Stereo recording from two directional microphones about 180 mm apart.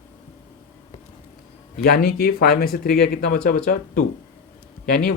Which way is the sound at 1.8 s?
55° left (ahead or behind).